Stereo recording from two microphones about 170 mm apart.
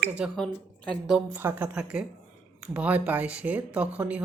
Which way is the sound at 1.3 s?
10° right (ahead or behind).